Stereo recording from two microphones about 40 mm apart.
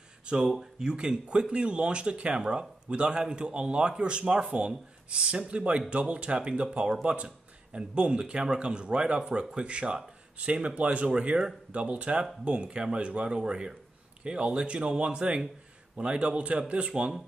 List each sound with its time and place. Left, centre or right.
0.3 s speech: right
6.8 s speech: centre